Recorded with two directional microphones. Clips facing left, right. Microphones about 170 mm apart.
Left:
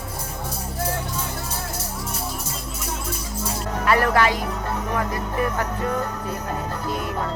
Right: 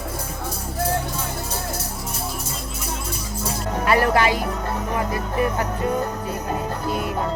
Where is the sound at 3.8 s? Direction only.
15° right (ahead or behind).